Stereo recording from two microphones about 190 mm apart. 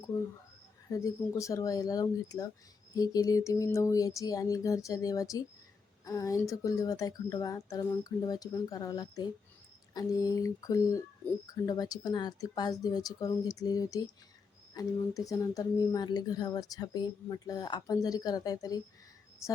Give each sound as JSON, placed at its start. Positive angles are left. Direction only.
{"t": 0.9, "sound": "speech", "side_deg": 15}